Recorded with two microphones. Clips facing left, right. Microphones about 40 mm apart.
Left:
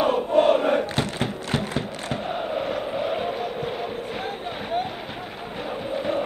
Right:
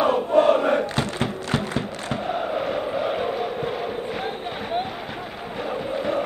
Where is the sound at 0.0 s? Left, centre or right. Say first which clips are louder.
Right 1 dB; right.